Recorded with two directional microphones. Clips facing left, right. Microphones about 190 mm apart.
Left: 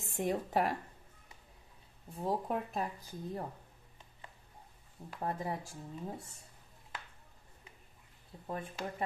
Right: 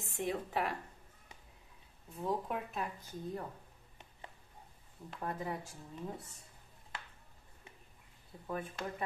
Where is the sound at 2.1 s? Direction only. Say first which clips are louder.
Left 2 dB; 35° left (ahead or behind).